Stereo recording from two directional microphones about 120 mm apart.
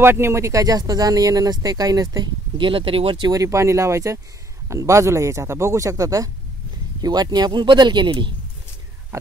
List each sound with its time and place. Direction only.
0.0 s speech: 20° right (ahead or behind); by 3.3 s 45° right (ahead or behind)
3.3 s speech: 25° right (ahead or behind)
9.1 s speech: 25° right (ahead or behind)